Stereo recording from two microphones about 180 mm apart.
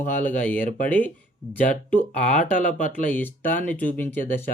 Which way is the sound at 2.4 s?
45° left (ahead or behind).